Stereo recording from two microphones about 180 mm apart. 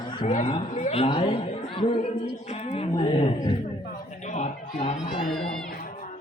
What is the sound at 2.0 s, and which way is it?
A woman's voice, 40° left (ahead or behind).